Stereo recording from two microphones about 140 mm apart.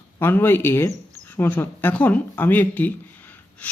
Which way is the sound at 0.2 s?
15° left (ahead or behind).